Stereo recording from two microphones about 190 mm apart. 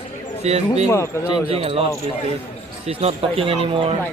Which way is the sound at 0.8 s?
15° left (ahead or behind).